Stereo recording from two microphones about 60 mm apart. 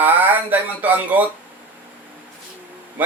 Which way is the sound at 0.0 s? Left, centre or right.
Right.